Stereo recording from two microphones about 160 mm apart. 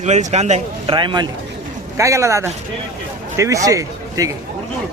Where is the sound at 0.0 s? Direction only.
45° right (ahead or behind).